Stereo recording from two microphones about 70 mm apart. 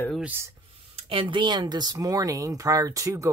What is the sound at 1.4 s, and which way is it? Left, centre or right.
Speech, right.